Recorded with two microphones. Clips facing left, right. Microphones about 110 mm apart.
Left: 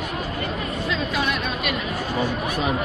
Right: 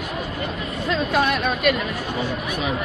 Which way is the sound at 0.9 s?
50° right (ahead or behind).